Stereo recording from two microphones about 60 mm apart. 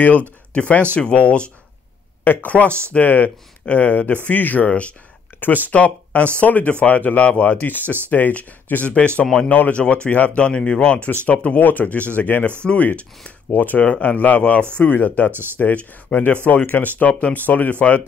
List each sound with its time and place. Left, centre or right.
0.6 s speech: left
11.1 s speech: left